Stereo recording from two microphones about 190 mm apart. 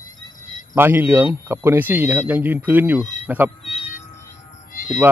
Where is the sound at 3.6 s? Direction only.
35° left (ahead or behind).